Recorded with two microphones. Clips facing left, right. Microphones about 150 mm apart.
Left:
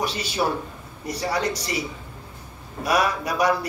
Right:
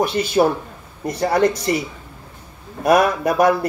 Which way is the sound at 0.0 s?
50° right (ahead or behind).